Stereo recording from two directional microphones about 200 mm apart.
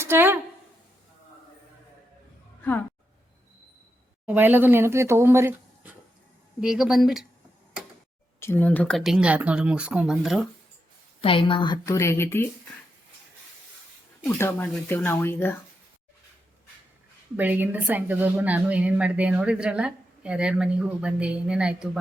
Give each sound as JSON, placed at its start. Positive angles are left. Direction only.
{"t": 0.0, "sound": "a sound", "side_deg": -10}
{"t": 4.3, "sound": "a woman's voice", "side_deg": -10}
{"t": 8.4, "sound": "a woman's voice", "side_deg": 10}
{"t": 11.2, "sound": "a woman's voice", "side_deg": 25}
{"t": 14.3, "sound": "speech", "side_deg": 10}
{"t": 17.3, "sound": "a woman's voice", "side_deg": -10}